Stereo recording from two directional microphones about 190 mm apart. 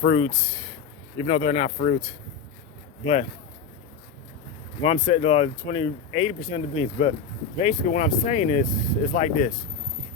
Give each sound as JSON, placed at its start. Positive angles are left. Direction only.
{"t": 0.0, "sound": "speech", "side_deg": 35}
{"t": 4.8, "sound": "speech", "side_deg": 30}